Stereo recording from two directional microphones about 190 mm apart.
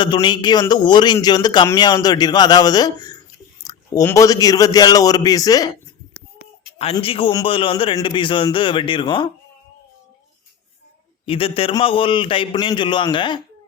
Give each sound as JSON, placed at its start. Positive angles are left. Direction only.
{"t": 0.0, "sound": "a man's voice", "side_deg": 25}
{"t": 6.9, "sound": "a man's voice", "side_deg": 30}
{"t": 11.3, "sound": "a man's voice", "side_deg": 30}